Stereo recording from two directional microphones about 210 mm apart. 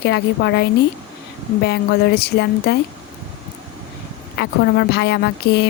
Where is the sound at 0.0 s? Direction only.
55° left (ahead or behind).